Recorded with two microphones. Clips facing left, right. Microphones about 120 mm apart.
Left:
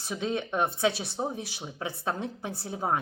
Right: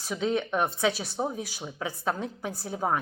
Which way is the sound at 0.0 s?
20° left (ahead or behind).